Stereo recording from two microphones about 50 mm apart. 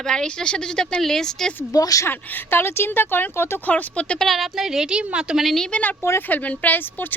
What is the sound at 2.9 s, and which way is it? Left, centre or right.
Speech, left.